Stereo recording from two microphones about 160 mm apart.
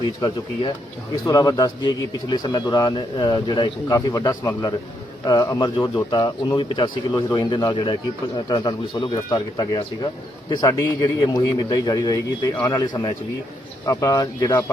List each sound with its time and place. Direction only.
1.2 s speech: 20° left (ahead or behind)